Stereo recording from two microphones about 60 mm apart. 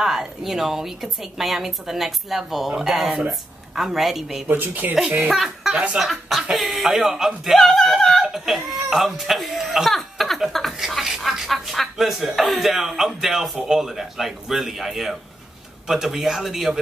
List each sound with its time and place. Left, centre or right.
0.0 s speech: centre
4.5 s speech: right
5.3 s speech: centre